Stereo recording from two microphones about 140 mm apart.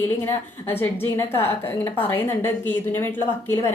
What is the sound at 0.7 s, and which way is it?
A woman's voice, 15° left (ahead or behind).